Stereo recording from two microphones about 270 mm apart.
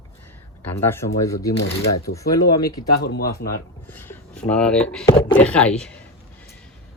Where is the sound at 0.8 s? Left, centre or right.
Centre.